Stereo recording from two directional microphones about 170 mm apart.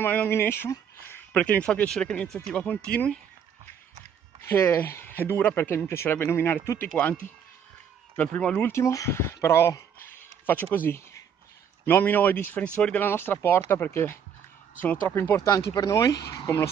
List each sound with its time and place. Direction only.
0.0 s speech: 10° left (ahead or behind)
4.4 s speech: 15° left (ahead or behind)